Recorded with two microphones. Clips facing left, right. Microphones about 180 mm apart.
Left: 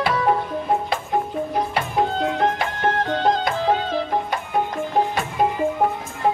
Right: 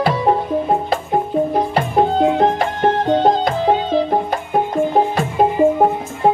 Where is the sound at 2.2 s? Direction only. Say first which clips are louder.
Right 7 dB; 30° right (ahead or behind).